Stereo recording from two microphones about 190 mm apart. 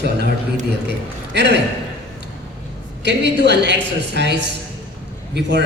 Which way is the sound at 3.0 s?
65° right (ahead or behind).